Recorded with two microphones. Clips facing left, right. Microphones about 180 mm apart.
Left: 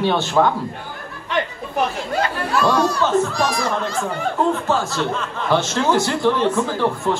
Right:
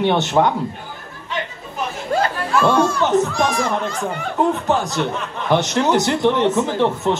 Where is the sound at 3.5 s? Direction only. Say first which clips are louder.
Right 1 dB; 35° left (ahead or behind).